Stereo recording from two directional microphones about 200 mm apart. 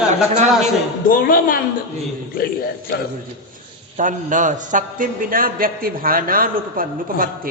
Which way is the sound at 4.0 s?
40° right (ahead or behind).